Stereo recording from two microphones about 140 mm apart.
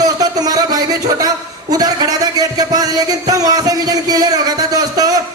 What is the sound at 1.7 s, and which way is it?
Speech, 25° right (ahead or behind).